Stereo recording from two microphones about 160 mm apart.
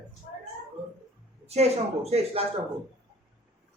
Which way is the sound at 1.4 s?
40° right (ahead or behind).